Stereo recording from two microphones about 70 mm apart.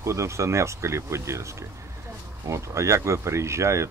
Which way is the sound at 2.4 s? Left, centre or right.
Right.